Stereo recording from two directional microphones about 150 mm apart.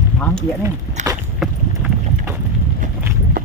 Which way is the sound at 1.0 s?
50° right (ahead or behind).